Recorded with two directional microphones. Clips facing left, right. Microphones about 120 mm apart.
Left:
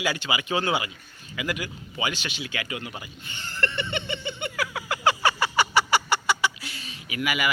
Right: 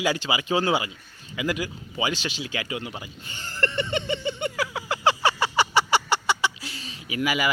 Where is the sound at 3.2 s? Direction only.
40° right (ahead or behind).